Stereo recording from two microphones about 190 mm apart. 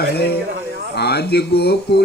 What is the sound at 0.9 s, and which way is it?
Speech, 60° left (ahead or behind).